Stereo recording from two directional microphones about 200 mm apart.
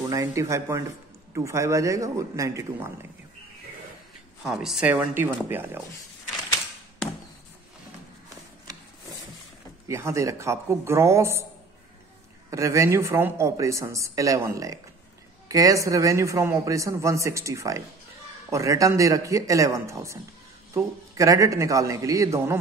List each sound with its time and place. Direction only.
0.0 s a man's voice: 15° right (ahead or behind)
4.4 s a man's voice: centre (ahead or behind)
9.8 s a man's voice: 15° right (ahead or behind)
12.4 s a man's voice: 15° right (ahead or behind)